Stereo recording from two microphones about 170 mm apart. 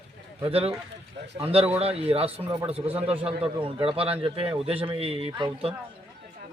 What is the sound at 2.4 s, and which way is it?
Speech, 25° right (ahead or behind).